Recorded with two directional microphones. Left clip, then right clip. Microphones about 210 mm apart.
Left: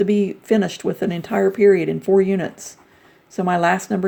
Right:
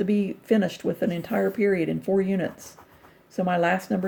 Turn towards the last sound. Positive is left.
turn(degrees=25)  # may be behind; listen again after turning